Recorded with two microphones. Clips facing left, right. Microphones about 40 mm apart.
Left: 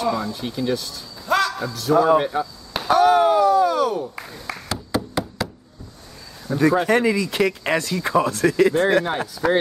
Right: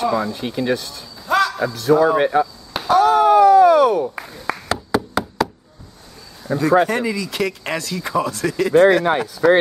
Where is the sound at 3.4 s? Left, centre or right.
Right.